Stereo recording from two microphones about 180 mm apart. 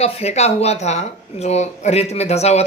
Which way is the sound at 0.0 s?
35° left (ahead or behind).